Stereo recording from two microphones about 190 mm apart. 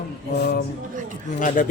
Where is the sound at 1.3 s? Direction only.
45° left (ahead or behind).